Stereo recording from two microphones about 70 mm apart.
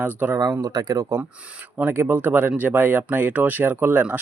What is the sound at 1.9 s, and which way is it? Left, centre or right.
Speech, right.